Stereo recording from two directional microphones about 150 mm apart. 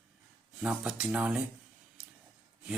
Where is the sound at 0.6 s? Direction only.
5° right (ahead or behind).